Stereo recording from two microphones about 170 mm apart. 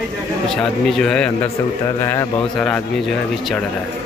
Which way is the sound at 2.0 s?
20° left (ahead or behind).